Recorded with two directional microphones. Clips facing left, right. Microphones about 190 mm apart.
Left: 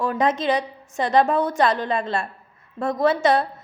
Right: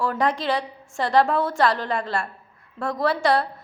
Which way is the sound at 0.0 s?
20° left (ahead or behind).